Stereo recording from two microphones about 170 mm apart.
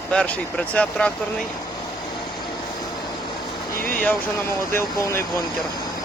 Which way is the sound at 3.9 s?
10° left (ahead or behind).